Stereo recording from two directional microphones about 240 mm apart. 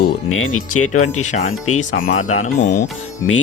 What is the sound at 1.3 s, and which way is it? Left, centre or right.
Speech, left.